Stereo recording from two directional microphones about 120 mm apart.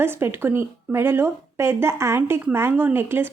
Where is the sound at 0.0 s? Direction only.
20° right (ahead or behind).